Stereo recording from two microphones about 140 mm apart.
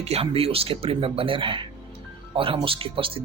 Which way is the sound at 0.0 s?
45° right (ahead or behind).